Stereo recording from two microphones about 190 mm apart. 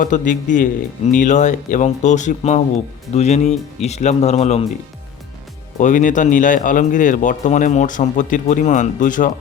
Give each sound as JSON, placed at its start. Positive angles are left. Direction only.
{"t": 0.0, "sound": "speech", "side_deg": 40}
{"t": 5.8, "sound": "speech", "side_deg": 40}